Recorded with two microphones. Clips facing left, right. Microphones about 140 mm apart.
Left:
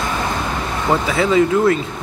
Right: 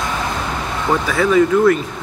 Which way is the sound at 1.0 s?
25° left (ahead or behind).